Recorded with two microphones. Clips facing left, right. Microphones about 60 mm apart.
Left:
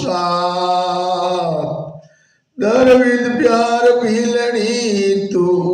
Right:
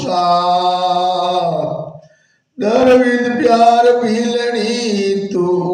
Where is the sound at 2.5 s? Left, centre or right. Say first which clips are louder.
Even; centre.